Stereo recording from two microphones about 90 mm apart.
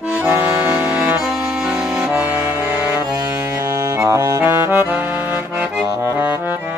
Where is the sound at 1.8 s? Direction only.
10° right (ahead or behind).